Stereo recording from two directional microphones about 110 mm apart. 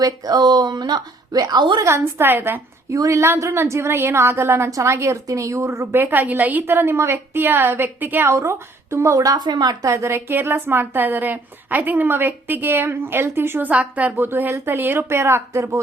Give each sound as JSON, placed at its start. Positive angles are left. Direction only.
{"t": 0.0, "sound": "speech", "side_deg": -35}
{"t": 1.8, "sound": "a woman's voice", "side_deg": -20}
{"t": 9.9, "sound": "a woman's voice", "side_deg": -25}